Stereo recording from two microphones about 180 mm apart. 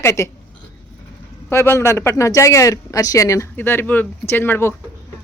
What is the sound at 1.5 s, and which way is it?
Speech, 15° left (ahead or behind).